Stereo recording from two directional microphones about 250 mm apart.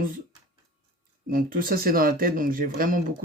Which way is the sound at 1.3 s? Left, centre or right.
Right.